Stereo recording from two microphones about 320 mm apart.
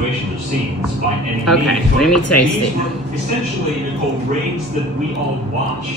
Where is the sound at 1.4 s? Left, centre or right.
Centre.